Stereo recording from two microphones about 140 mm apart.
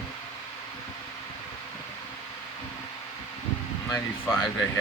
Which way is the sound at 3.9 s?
15° left (ahead or behind).